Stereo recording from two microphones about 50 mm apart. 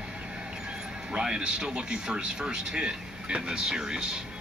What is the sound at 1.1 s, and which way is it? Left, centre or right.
Speech, centre.